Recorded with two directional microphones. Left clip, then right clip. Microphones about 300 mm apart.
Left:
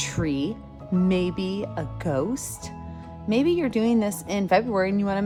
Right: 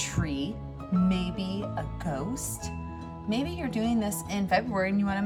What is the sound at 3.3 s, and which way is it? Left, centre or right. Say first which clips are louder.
A woman's voice: left 10 dB; left.